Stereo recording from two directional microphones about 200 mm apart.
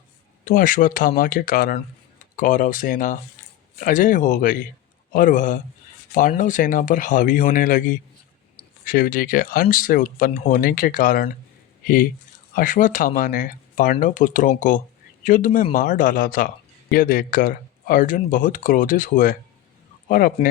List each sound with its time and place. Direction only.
0.4 s speech: 40° left (ahead or behind)